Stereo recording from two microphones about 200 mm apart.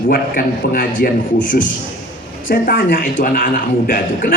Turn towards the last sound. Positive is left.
turn(degrees=45)  # may be behind; listen again after turning